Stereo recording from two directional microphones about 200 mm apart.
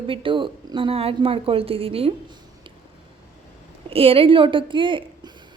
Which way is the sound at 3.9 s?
30° right (ahead or behind).